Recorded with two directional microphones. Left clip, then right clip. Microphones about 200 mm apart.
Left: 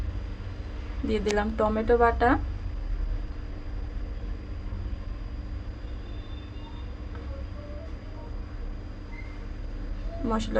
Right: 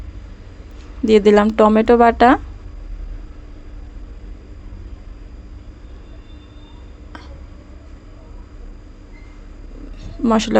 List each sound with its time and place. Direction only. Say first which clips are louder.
1.0 s speech: right 15 dB; 50° right (ahead or behind)
10.2 s speech: right 13 dB; 45° right (ahead or behind)